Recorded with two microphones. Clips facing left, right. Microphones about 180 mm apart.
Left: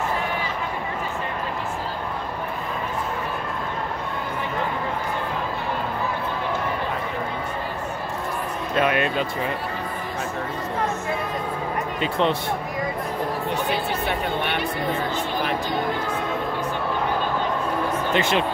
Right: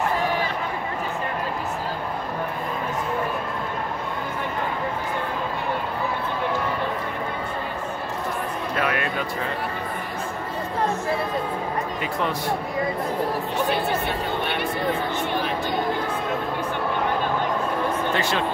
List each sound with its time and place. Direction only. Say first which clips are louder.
8.7 s speech: left 5 dB; 20° left (ahead or behind)
12.0 s speech: left 7 dB; 25° left (ahead or behind)
18.1 s speech: left 3 dB; 20° left (ahead or behind)